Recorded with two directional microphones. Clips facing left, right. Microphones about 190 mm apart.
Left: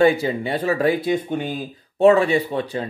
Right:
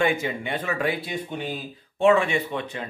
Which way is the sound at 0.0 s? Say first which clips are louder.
Left 7 dB; 35° left (ahead or behind).